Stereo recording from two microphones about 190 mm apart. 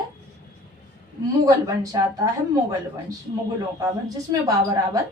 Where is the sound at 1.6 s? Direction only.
20° right (ahead or behind).